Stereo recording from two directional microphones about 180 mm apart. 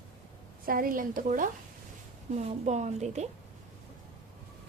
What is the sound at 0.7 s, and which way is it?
A woman's voice, 50° right (ahead or behind).